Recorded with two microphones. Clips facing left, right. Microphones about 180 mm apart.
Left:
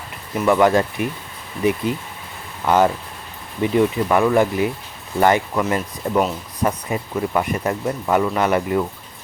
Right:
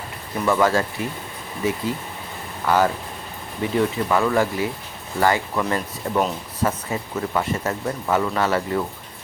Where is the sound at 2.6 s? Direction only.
20° left (ahead or behind).